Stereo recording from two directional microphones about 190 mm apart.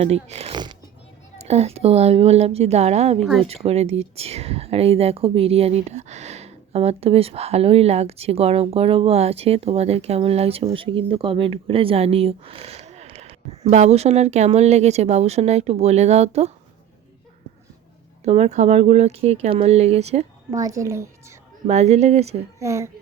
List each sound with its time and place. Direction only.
0.0 s speech: 35° right (ahead or behind)
3.2 s speech: centre (ahead or behind)
3.4 s speech: 30° right (ahead or behind)
18.3 s speech: 35° right (ahead or behind)
20.5 s a woman's voice: 20° right (ahead or behind)
21.7 s speech: 35° right (ahead or behind)
22.6 s a woman's voice: 15° right (ahead or behind)